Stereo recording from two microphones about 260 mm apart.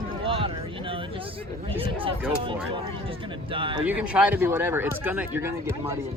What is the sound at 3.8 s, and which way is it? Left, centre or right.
Speech, centre.